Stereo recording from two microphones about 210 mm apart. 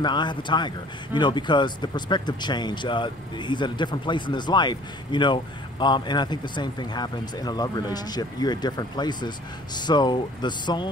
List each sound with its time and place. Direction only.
0.0 s speech: 20° left (ahead or behind)